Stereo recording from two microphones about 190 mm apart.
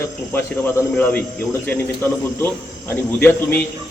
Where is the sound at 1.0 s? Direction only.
10° left (ahead or behind).